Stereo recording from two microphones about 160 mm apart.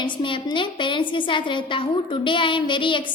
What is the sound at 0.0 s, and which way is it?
A woman's voice, 30° left (ahead or behind).